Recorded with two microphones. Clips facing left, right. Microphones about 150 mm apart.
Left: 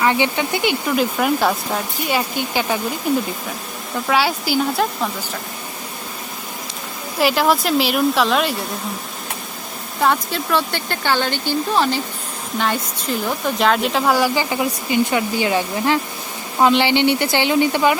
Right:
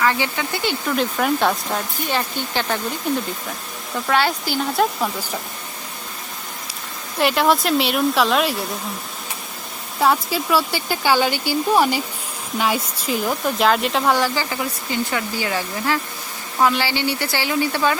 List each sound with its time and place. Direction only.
0.0 s speech: 20° left (ahead or behind)
0.9 s speech: 5° left (ahead or behind)
7.2 s speech: centre (ahead or behind)
10.0 s a woman's voice: 5° right (ahead or behind); by 17.9 s 20° left (ahead or behind)